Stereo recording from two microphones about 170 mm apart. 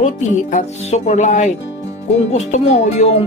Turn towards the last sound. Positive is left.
turn(degrees=40)  # may be behind; listen again after turning